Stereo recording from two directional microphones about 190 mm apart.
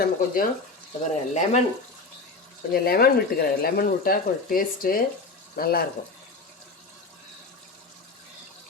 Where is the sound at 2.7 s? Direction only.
55° left (ahead or behind).